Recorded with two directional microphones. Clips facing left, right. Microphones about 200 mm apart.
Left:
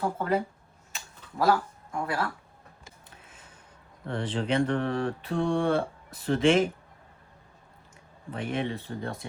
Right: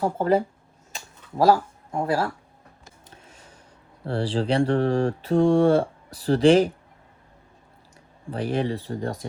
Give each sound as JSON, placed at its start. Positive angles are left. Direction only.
{"t": 0.0, "sound": "mantra", "side_deg": -35}
{"t": 1.5, "sound": "speech", "side_deg": -30}
{"t": 3.1, "sound": "a sound", "side_deg": -30}
{"t": 4.0, "sound": "mantra", "side_deg": -30}
{"t": 8.3, "sound": "mantra", "side_deg": -35}